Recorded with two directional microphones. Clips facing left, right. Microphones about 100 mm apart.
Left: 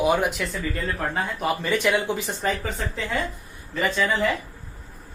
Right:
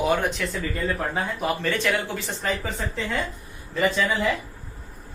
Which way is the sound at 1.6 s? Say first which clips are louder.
Left 2 dB; 15° left (ahead or behind).